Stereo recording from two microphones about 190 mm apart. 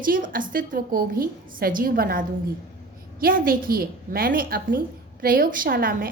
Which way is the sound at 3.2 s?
50° right (ahead or behind).